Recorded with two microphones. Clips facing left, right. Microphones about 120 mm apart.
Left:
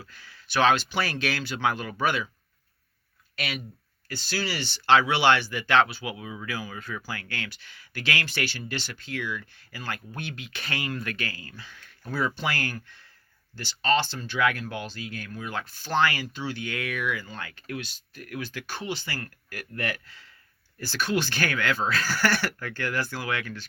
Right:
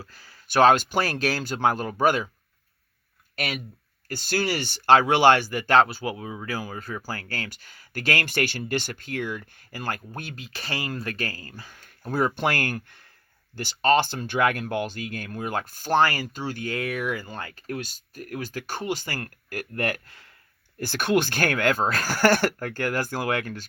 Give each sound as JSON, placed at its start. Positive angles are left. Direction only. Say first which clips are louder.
{"t": 0.0, "sound": "speech", "louder": "right 2 dB", "side_deg": -40}
{"t": 3.3, "sound": "speech", "louder": "right 3 dB", "side_deg": -45}